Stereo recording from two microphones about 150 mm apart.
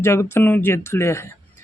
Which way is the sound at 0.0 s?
15° left (ahead or behind).